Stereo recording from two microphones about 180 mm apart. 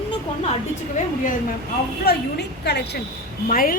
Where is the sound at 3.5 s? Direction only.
50° left (ahead or behind).